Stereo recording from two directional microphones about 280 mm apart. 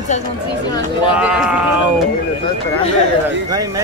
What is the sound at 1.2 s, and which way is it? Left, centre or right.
Speech, centre.